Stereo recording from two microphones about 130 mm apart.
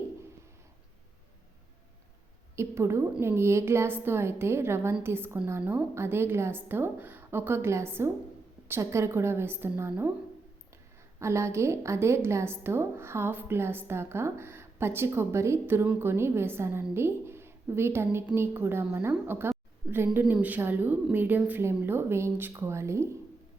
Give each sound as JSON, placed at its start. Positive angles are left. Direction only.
{"t": 2.6, "sound": "a woman's voice", "side_deg": -20}
{"t": 11.2, "sound": "a woman's voice", "side_deg": -20}